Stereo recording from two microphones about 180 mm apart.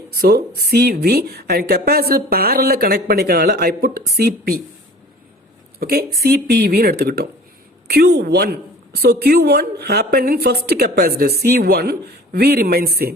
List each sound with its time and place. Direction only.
0.2 s a woman's voice: 60° right (ahead or behind)
5.8 s a woman's voice: 60° right (ahead or behind)